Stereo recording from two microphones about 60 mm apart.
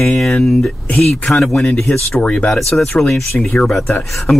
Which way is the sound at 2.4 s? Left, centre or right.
Centre.